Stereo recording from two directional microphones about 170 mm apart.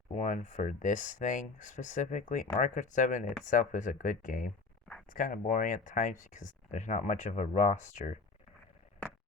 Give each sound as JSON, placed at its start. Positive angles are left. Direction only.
{"t": 0.1, "sound": "speech", "side_deg": 45}